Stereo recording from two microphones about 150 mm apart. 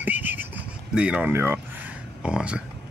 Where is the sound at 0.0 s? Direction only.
10° right (ahead or behind).